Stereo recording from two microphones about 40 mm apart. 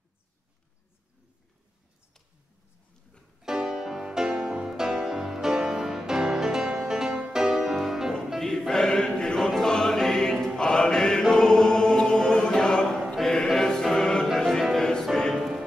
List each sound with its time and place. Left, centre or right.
3.3 s music: centre
8.4 s choir: centre
9.5 s music: centre
11.3 s choir: centre
13.1 s music: centre
13.9 s music: left